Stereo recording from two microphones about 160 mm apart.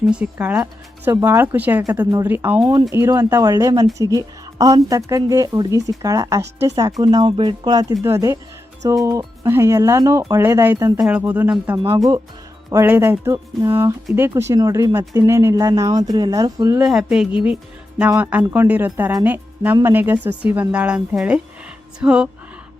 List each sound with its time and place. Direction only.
0.1 s speech: 10° right (ahead or behind)
12.7 s speech: 15° right (ahead or behind)
16.8 s a woman's voice: 5° right (ahead or behind)